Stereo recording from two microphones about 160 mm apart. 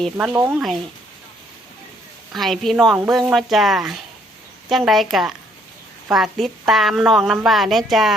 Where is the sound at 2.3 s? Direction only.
Centre (ahead or behind).